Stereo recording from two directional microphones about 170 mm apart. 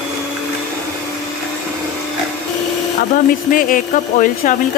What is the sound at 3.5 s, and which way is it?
Speech, 55° left (ahead or behind).